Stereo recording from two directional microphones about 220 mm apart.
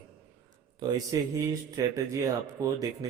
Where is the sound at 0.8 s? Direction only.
15° right (ahead or behind).